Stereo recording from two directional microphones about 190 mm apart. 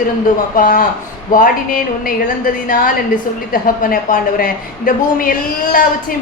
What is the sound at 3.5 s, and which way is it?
A woman's voice, 50° left (ahead or behind).